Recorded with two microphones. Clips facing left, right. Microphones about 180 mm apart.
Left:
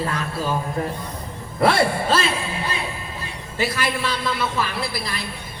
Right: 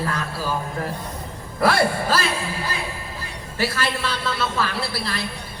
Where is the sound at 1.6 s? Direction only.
25° left (ahead or behind).